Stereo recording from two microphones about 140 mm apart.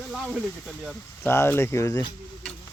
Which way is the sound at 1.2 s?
15° left (ahead or behind).